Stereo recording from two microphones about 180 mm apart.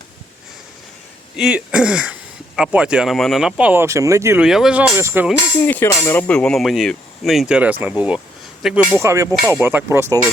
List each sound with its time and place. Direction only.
1.4 s speech: 5° right (ahead or behind)
4.4 s speech: 5° right (ahead or behind)
5.5 s speech: 10° left (ahead or behind); by 10.2 s 15° right (ahead or behind)